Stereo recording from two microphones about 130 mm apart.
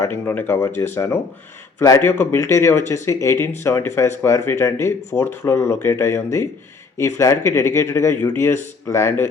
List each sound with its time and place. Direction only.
0.0 s a man's voice: 15° left (ahead or behind)